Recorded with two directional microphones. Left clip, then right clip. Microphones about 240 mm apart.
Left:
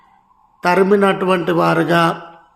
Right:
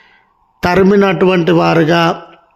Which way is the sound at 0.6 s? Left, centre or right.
Right.